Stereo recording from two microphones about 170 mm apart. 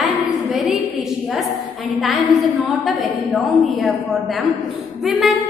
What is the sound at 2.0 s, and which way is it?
A woman's voice, centre (ahead or behind).